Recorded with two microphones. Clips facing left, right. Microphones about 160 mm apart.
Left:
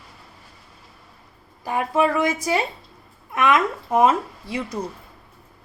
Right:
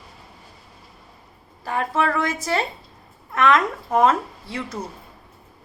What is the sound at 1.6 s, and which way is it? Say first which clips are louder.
Speech: left 2 dB; 15° left (ahead or behind).